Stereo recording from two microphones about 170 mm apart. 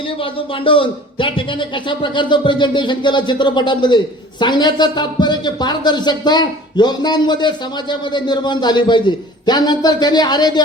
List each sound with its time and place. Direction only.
0.2 s a man's voice: 30° left (ahead or behind)